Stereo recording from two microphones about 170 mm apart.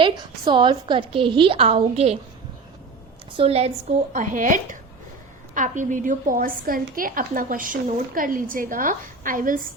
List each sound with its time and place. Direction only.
0.0 s a woman's voice: 25° right (ahead or behind)
3.3 s a woman's voice: 35° right (ahead or behind)
4.1 s a woman's voice: 50° right (ahead or behind)